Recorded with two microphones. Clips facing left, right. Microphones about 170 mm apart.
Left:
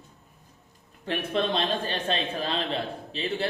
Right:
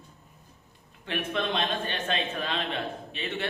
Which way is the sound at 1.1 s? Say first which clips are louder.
Left 3 dB; 35° left (ahead or behind).